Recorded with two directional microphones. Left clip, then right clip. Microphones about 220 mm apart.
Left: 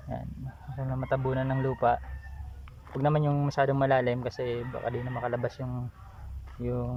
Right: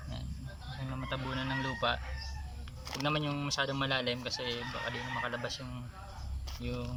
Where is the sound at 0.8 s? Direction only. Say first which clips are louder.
Left 9 dB; 35° left (ahead or behind).